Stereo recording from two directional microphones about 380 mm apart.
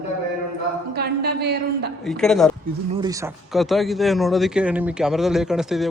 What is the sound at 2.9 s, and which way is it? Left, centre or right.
A man's voice, centre.